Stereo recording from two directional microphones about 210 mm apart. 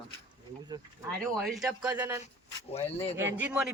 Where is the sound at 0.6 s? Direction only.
20° right (ahead or behind).